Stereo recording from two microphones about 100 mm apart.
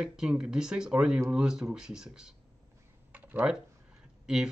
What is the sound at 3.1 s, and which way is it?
Computer keyboard, 15° right (ahead or behind).